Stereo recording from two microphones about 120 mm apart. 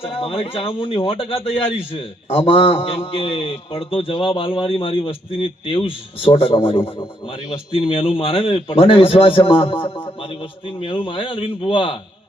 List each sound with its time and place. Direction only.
0.0 s a man's voice: 55° left (ahead or behind)
10.8 s a man's voice: 50° left (ahead or behind)